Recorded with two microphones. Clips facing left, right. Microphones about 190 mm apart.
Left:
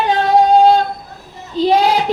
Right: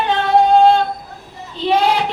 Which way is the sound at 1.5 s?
40° left (ahead or behind).